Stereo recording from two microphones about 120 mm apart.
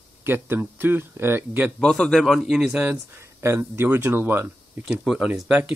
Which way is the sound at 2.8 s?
20° right (ahead or behind).